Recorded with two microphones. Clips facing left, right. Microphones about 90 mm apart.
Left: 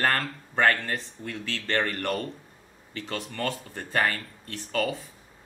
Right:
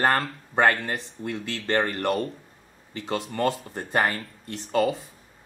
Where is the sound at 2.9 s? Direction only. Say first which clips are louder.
Right 5 dB; 20° right (ahead or behind).